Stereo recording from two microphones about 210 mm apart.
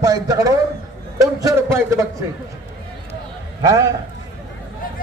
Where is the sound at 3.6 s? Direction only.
15° right (ahead or behind).